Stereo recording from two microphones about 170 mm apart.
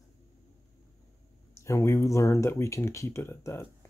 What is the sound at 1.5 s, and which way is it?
Speech, 15° left (ahead or behind).